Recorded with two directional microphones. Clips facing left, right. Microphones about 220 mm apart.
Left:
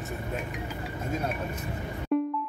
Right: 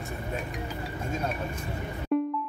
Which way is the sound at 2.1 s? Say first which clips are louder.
Even; centre (ahead or behind).